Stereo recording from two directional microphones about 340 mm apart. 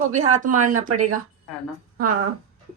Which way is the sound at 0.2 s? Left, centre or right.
Right.